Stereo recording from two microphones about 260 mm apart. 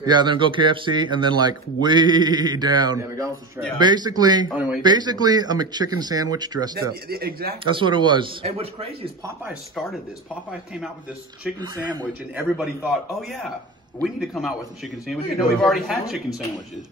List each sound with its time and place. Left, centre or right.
0.0 s speech: centre
4.5 s a man's voice: centre
4.8 s speech: centre
6.7 s speech: right
7.6 s speech: centre
9.4 s a man's voice: centre
11.6 s speech: centre
12.5 s a man's voice: centre